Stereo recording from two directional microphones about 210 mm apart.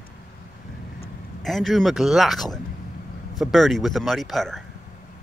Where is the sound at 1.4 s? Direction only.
Centre (ahead or behind).